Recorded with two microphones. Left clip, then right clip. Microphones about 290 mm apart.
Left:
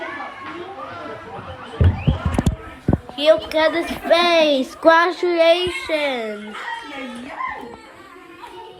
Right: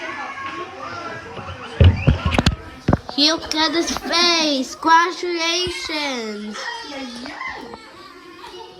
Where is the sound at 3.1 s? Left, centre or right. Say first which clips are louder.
Left 4 dB; centre.